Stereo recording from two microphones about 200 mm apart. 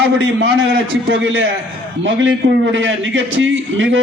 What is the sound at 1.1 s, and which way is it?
Speech, 70° right (ahead or behind).